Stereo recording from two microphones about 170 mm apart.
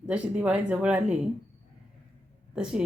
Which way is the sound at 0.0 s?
5° right (ahead or behind).